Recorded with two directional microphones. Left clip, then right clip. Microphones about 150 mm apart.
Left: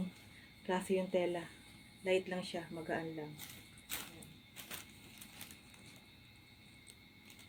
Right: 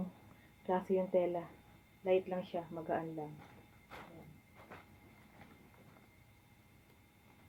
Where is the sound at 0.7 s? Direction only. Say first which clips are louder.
Right 2 dB; 10° left (ahead or behind).